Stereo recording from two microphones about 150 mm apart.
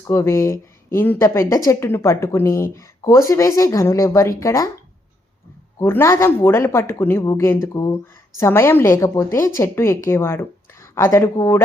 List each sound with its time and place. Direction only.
0.0 s speech: 20° left (ahead or behind)
5.8 s a woman's voice: 15° left (ahead or behind)